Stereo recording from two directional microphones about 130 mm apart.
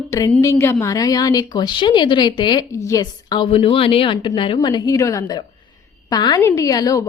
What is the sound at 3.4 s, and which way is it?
Speech, 45° left (ahead or behind).